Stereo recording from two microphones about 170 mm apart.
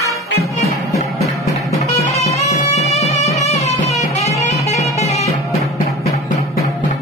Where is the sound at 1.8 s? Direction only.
40° left (ahead or behind).